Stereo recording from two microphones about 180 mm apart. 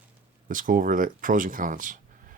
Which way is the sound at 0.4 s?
50° right (ahead or behind).